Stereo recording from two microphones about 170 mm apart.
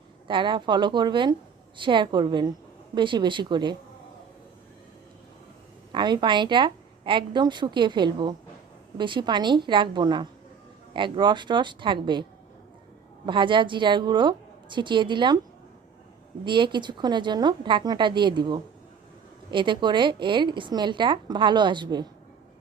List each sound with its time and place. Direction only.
0.3 s a woman's voice: 30° right (ahead or behind)
5.9 s a woman's voice: 25° right (ahead or behind)
13.2 s a woman's voice: 30° right (ahead or behind)
16.4 s a woman's voice: 25° right (ahead or behind)